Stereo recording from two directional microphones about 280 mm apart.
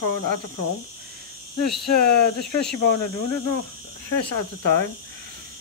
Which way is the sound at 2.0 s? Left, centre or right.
Left.